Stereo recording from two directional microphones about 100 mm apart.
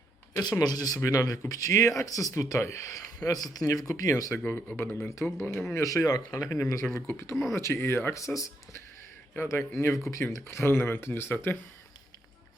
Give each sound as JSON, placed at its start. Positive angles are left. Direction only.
{"t": 0.6, "sound": "speech", "side_deg": 40}